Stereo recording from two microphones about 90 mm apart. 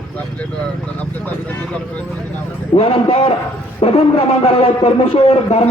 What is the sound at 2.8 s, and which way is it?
A man's voice, 90° left.